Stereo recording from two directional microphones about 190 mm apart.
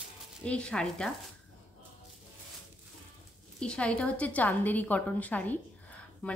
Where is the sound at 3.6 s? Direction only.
5° left (ahead or behind).